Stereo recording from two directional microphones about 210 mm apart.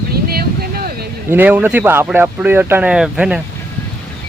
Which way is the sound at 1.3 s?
10° right (ahead or behind).